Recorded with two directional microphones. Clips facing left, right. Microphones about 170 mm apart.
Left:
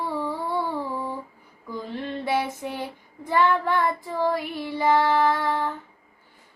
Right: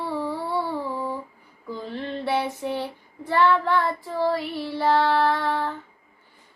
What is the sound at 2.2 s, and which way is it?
Child singing, 10° left (ahead or behind).